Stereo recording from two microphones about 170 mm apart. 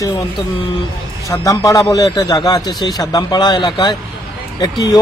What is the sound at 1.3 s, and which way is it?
Speech, 20° left (ahead or behind).